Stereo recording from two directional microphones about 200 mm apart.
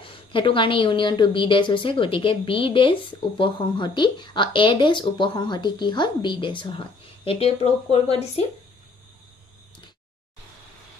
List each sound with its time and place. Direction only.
0.0 s a woman's voice: 25° left (ahead or behind)